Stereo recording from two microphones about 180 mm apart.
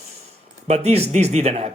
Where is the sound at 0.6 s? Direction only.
35° right (ahead or behind).